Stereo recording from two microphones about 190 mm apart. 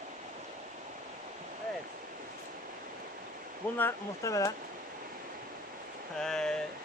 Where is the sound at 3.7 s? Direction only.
15° left (ahead or behind).